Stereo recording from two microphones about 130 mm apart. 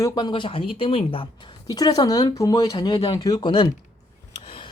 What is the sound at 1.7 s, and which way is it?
Speech, 30° left (ahead or behind).